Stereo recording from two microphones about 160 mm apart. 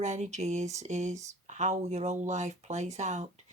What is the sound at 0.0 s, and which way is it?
Speech, 45° right (ahead or behind).